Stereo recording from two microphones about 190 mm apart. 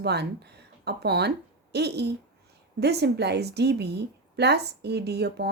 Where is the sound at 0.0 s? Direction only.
60° right (ahead or behind).